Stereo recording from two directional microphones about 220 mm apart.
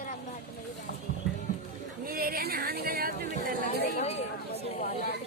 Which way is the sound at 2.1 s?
40° right (ahead or behind).